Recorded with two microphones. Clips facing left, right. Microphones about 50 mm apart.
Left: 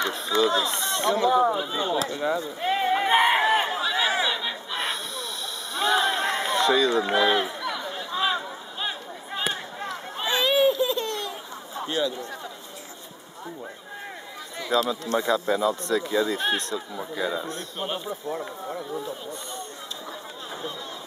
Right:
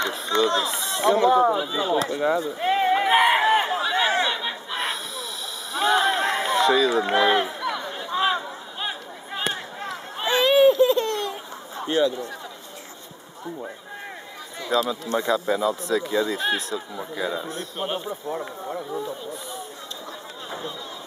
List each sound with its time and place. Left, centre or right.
0.0 s a sound: centre
1.8 s speech: centre
2.7 s a sound: centre
4.1 s chatter: centre
4.4 s snort: centre
5.7 s run: centre
9.5 s a sound: centre
10.2 s a sound: right
12.0 s speech: right
14.7 s speech: centre
17.8 s speech: centre
18.2 s speech: centre